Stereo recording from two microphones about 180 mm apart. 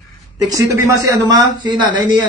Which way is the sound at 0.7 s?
20° right (ahead or behind).